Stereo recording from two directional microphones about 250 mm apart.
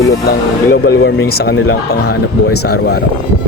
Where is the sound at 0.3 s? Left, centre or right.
Left.